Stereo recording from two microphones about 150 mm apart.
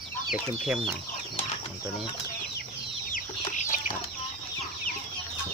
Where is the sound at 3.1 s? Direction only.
60° left (ahead or behind).